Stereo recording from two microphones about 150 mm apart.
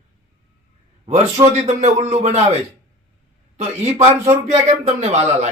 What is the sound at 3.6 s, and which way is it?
Speech, 45° right (ahead or behind).